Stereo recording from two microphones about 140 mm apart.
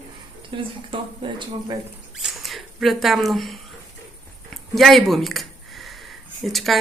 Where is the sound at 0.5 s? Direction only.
35° right (ahead or behind).